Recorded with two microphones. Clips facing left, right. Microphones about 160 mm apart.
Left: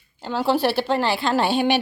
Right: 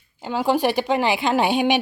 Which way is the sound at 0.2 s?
10° right (ahead or behind).